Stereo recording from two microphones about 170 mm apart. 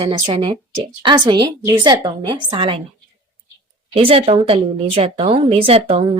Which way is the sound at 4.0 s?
35° right (ahead or behind).